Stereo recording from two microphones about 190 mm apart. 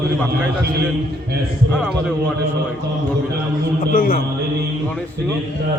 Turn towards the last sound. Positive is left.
turn(degrees=50)  # may be behind; listen again after turning